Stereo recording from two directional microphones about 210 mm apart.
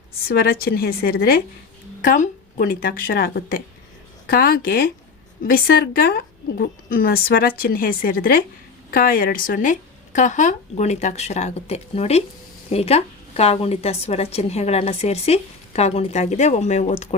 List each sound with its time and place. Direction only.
0.3 s a woman's voice: 45° left (ahead or behind)